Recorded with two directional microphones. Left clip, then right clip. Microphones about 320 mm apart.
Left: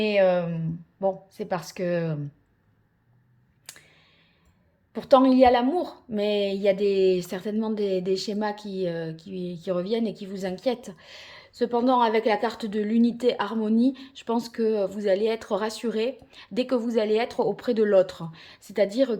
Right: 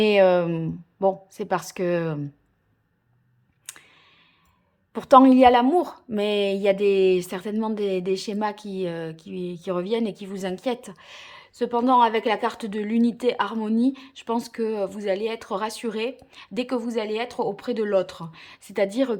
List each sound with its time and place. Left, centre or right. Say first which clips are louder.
0.0 s a woman's voice: right 4 dB; centre
3.7 s clicking: right 3 dB; centre
4.9 s a woman's voice: right 4 dB; centre